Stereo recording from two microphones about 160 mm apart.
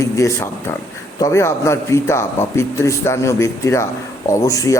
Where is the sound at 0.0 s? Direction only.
20° left (ahead or behind).